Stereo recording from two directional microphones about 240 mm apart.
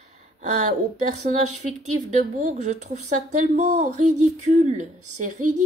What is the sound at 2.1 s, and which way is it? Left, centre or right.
Speech, right.